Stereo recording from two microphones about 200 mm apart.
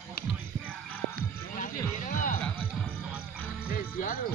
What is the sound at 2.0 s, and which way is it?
Music, 45° left (ahead or behind).